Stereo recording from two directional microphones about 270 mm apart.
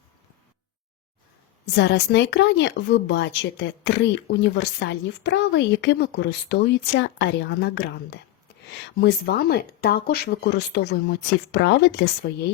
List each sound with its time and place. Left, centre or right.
1.6 s speech: left